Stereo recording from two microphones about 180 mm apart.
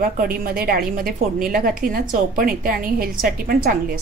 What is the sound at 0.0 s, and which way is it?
A woman's voice, 55° right (ahead or behind).